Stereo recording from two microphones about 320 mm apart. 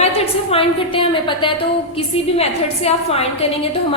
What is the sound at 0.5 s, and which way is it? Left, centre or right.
A woman's voice, centre.